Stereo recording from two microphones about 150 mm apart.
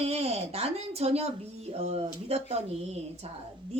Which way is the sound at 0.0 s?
45° right (ahead or behind).